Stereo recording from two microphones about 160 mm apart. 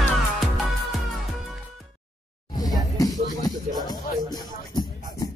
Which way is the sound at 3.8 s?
25° left (ahead or behind).